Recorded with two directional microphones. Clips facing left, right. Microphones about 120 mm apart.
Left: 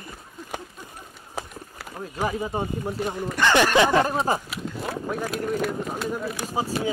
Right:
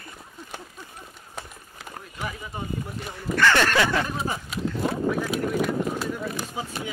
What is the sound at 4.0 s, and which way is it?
Speech, 40° left (ahead or behind).